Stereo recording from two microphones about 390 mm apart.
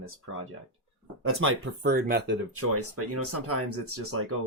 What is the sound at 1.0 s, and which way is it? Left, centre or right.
Speech, right.